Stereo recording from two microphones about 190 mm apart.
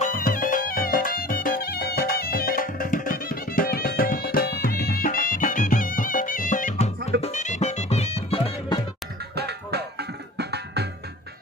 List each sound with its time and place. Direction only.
0.0 s music: 45° left (ahead or behind); by 8.8 s 25° left (ahead or behind)
9.4 s music: 60° right (ahead or behind)